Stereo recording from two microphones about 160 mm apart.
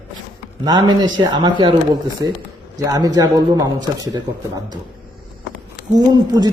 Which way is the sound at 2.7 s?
25° right (ahead or behind).